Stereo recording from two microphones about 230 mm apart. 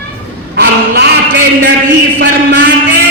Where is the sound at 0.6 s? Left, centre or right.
Right.